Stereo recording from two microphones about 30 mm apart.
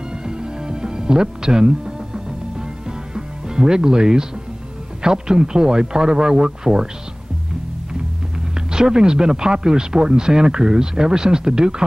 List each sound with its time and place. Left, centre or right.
0.2 s music: right
3.2 s speech: right
8.5 s speech: right